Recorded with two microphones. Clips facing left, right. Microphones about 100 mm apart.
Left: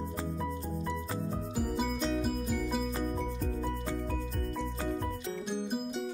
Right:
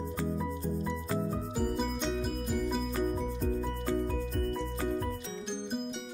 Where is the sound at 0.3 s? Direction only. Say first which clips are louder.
Right 2 dB; centre (ahead or behind).